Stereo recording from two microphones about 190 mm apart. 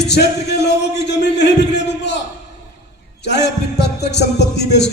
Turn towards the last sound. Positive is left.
turn(degrees=65)  # may be behind; listen again after turning